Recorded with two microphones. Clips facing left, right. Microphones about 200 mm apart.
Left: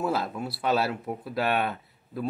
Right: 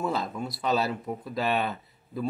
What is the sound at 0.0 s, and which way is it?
Speech, 5° left (ahead or behind).